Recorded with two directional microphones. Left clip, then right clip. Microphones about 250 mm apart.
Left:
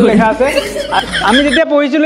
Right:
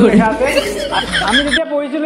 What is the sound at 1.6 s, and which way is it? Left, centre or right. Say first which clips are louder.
Speech: left 7 dB; left.